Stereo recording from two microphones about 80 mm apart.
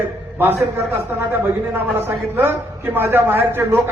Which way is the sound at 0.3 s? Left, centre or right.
Right.